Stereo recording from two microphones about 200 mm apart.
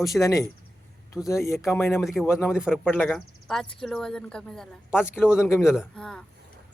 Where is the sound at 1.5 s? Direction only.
Centre (ahead or behind).